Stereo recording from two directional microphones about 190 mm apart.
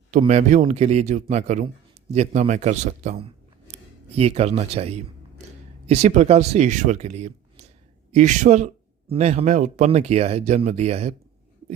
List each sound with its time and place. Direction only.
0.2 s a man's voice: 35° right (ahead or behind)